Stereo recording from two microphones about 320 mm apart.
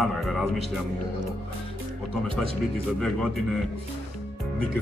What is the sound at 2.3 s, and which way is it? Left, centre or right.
Speech, left.